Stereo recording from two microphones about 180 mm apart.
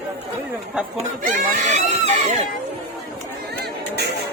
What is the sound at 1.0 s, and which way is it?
Speech, 50° right (ahead or behind).